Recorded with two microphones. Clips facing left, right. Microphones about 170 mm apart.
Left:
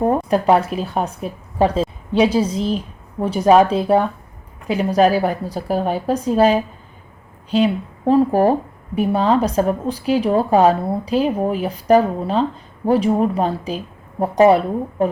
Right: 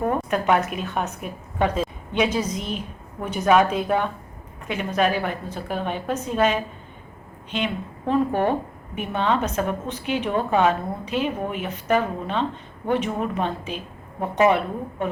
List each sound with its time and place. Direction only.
0.0 s a woman's voice: 35° left (ahead or behind)